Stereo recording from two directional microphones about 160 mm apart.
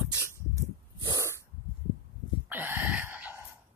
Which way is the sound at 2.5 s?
10° right (ahead or behind).